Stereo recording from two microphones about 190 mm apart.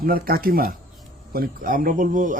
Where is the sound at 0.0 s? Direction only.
50° right (ahead or behind).